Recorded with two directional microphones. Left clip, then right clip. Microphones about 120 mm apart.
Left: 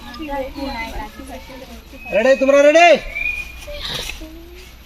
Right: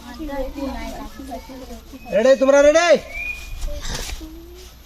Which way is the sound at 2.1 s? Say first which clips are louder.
Left 1 dB; 20° right (ahead or behind).